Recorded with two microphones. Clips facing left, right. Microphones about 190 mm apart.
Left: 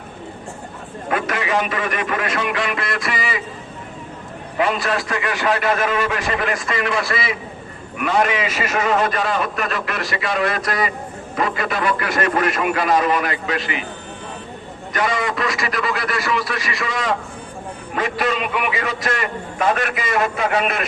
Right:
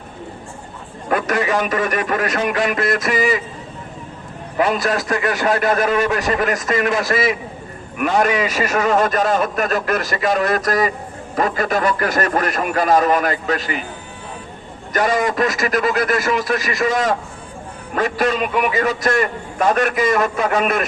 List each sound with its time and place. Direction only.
1.1 s a man's voice: 45° right (ahead or behind)
4.5 s a man's voice: 40° right (ahead or behind)
14.9 s a man's voice: 45° right (ahead or behind)